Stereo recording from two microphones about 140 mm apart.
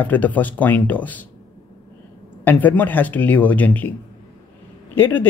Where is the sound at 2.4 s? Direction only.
10° left (ahead or behind).